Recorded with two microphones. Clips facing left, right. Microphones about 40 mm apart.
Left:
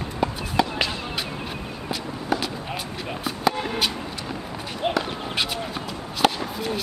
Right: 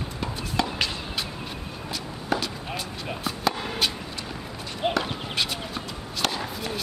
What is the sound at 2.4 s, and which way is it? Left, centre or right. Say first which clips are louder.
Basketball bounce: left 2 dB; centre.